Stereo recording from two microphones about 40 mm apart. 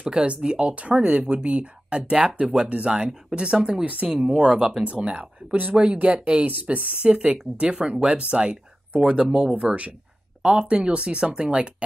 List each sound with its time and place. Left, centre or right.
0.0 s speech: right
2.0 s speech: centre
3.8 s speech: right
4.1 s speech: right
4.8 s speech: right
6.4 s speech: right